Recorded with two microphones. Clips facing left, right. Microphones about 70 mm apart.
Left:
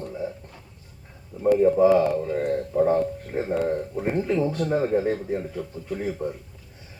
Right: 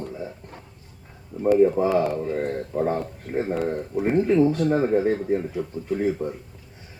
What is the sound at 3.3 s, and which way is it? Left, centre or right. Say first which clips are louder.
Speech: even; centre.